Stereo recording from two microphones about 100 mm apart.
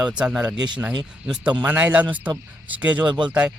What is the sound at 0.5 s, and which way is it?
Speech, 45° right (ahead or behind).